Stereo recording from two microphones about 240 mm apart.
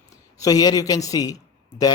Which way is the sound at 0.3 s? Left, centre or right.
Centre.